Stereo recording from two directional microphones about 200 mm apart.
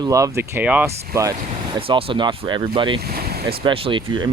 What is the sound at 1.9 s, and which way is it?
Speech, 25° right (ahead or behind).